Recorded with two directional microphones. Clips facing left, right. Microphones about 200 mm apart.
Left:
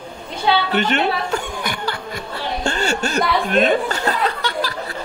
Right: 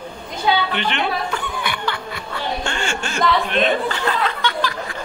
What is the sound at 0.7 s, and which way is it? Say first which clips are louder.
Music: left 4 dB; 45° left (ahead or behind).